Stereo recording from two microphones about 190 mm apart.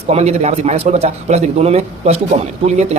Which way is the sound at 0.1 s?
35° right (ahead or behind).